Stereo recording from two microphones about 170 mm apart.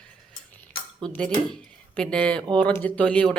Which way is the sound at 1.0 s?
10° left (ahead or behind).